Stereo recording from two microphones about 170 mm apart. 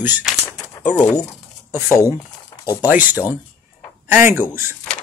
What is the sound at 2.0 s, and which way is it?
Crumpling, 20° left (ahead or behind).